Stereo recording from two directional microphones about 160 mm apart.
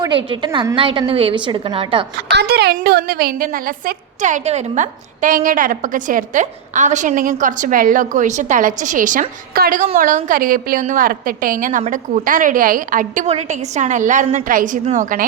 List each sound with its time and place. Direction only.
0.0 s a woman's voice: 30° right (ahead or behind)
2.3 s a woman's voice: 90° right; by 15.3 s 55° right (ahead or behind)